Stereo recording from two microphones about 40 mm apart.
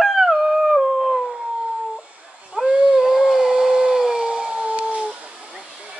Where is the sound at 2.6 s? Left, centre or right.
Right.